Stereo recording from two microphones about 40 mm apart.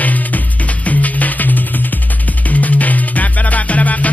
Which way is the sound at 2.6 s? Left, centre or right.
Left.